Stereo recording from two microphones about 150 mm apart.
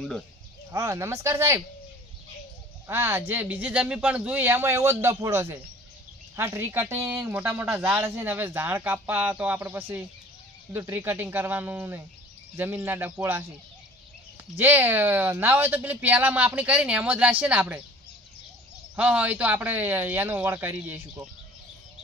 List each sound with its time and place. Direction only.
0.7 s speech: 20° right (ahead or behind)
2.9 s speech: 15° right (ahead or behind)
14.6 s speech: 10° right (ahead or behind)
18.9 s speech: 10° right (ahead or behind)